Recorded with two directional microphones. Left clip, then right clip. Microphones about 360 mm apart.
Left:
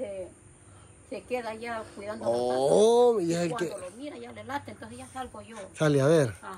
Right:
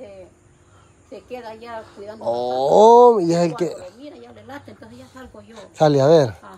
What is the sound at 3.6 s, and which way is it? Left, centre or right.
Speech, right.